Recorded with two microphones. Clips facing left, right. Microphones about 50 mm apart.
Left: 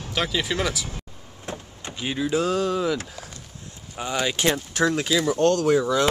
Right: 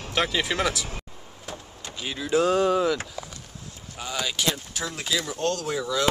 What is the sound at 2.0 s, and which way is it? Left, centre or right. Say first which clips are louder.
Speech: left 6 dB; centre.